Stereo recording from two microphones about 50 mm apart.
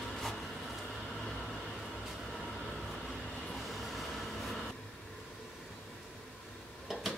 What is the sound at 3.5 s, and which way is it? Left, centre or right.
Train, centre.